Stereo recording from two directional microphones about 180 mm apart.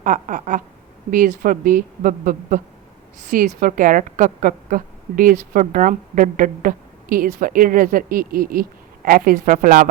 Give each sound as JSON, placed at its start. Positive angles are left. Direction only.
{"t": 0.0, "sound": "a woman's voice", "side_deg": -45}